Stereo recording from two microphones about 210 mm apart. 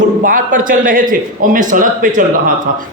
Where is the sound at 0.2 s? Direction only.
40° right (ahead or behind).